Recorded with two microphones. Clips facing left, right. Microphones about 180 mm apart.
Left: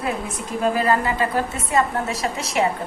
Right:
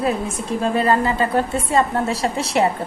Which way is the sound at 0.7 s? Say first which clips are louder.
Right 5 dB; 30° right (ahead or behind).